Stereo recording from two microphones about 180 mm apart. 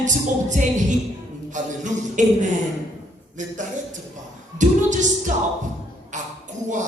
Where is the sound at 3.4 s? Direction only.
45° right (ahead or behind).